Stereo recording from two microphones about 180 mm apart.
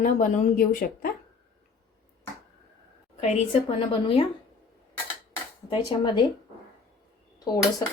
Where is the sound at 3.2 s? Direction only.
35° left (ahead or behind).